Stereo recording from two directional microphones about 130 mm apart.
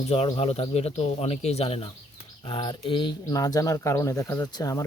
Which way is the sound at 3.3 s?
25° left (ahead or behind).